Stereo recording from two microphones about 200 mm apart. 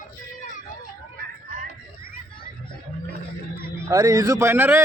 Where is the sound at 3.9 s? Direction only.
15° right (ahead or behind).